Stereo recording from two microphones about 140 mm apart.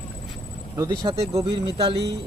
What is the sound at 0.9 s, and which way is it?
Speech, 35° right (ahead or behind).